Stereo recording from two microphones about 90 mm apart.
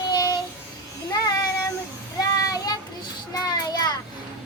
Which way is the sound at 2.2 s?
40° left (ahead or behind).